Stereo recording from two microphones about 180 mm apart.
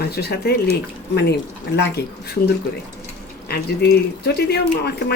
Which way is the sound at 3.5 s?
65° left (ahead or behind).